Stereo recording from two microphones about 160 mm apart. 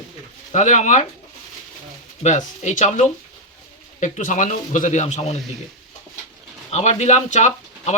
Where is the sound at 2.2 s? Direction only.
50° left (ahead or behind).